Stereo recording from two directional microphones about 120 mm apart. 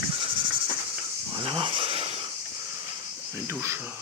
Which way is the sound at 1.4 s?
45° right (ahead or behind).